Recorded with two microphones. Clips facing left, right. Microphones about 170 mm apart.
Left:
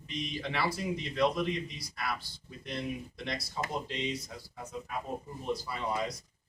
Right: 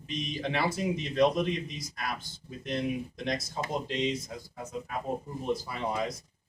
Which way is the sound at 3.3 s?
45° right (ahead or behind).